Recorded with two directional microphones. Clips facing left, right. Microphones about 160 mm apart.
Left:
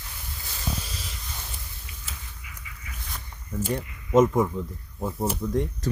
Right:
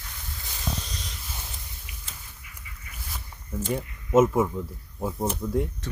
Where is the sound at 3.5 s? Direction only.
10° right (ahead or behind).